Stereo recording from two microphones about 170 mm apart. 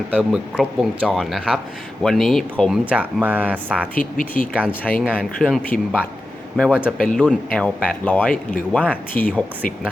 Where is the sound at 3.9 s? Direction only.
55° left (ahead or behind).